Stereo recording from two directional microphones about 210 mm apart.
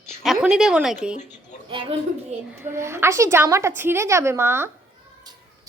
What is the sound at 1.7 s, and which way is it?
Speech, 25° right (ahead or behind).